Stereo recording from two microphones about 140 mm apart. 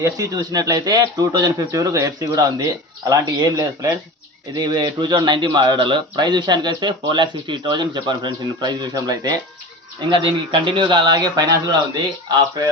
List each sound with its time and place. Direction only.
0.0 s a man's voice: 25° right (ahead or behind)